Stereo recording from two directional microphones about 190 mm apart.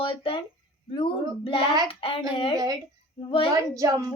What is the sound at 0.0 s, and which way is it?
Speech, 25° left (ahead or behind).